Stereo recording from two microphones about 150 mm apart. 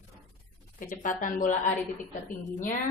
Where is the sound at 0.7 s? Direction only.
60° left (ahead or behind).